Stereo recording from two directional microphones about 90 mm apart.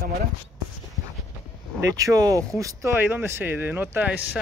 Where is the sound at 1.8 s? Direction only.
40° right (ahead or behind).